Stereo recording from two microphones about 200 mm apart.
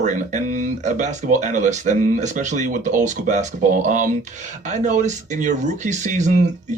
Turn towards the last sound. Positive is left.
turn(degrees=-40)  # may be behind; listen again after turning